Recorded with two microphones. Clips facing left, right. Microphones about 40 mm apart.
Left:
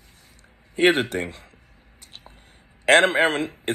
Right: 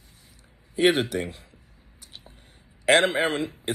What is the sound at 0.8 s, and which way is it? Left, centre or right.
Speech, left.